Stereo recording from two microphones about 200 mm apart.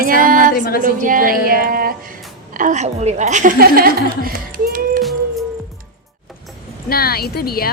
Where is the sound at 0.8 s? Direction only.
45° right (ahead or behind).